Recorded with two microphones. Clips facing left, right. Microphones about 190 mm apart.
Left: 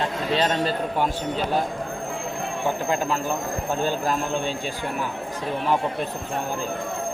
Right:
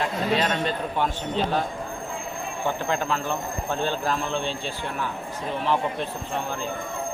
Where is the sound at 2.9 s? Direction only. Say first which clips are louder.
Left 2 dB; 10° left (ahead or behind).